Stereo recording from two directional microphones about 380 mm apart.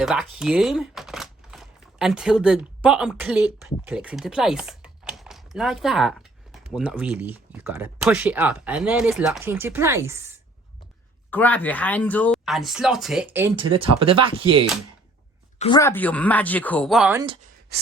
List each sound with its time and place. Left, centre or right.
0.0 s speech: centre
11.3 s speech: centre
15.5 s speech: centre
17.7 s gasp: right